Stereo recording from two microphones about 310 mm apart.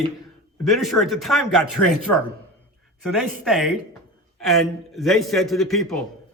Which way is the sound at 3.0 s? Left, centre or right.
Centre.